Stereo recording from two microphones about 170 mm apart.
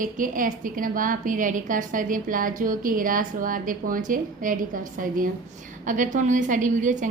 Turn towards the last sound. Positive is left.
turn(degrees=-50)  # may be behind; listen again after turning